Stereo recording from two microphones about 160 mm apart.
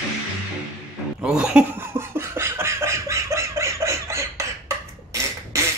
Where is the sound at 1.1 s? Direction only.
5° right (ahead or behind).